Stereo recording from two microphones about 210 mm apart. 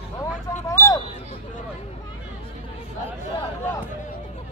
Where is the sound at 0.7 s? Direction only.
15° left (ahead or behind).